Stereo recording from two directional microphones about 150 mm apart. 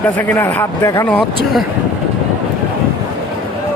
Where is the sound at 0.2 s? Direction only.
15° left (ahead or behind).